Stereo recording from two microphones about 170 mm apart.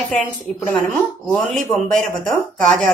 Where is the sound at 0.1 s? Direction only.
5° left (ahead or behind).